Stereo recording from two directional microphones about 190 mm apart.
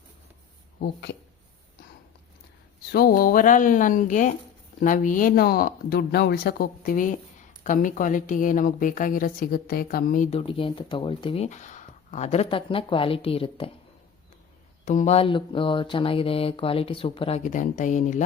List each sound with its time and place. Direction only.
2.9 s speech: 50° left (ahead or behind)
10.2 s speech: 30° left (ahead or behind)
14.8 s speech: 35° left (ahead or behind)